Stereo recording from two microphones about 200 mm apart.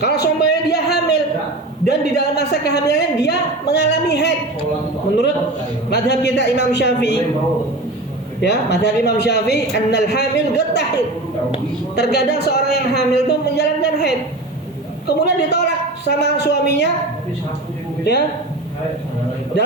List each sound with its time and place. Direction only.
0.0 s a sound: 55° left (ahead or behind)
1.9 s a woman's voice: 55° left (ahead or behind)
5.9 s a woman's voice: 60° left (ahead or behind)
8.4 s a woman's voice: 55° left (ahead or behind)